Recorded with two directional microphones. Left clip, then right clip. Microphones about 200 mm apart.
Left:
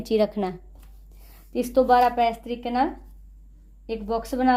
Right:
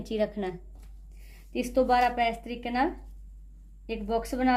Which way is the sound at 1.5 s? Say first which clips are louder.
Left 6 dB; 15° left (ahead or behind).